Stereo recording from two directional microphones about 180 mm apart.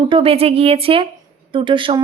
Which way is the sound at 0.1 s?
30° right (ahead or behind).